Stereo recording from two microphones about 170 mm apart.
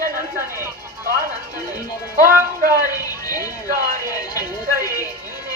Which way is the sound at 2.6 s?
60° right (ahead or behind).